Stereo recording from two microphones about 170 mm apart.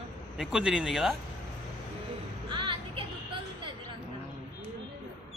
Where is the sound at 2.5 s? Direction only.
30° right (ahead or behind).